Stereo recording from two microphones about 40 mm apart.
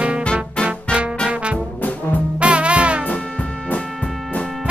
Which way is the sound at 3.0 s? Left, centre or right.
Left.